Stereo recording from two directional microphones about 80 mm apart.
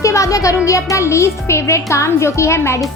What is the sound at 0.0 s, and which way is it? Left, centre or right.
A woman's voice, left.